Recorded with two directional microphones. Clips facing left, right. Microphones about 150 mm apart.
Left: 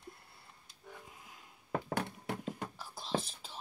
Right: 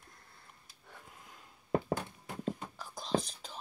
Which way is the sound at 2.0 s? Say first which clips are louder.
Left 5 dB; 70° left (ahead or behind).